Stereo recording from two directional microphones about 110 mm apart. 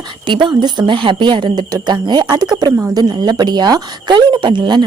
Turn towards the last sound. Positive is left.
turn(degrees=-45)  # may be behind; listen again after turning